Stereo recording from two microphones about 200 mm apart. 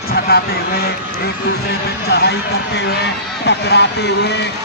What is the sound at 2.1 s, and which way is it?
Speech, 55° left (ahead or behind).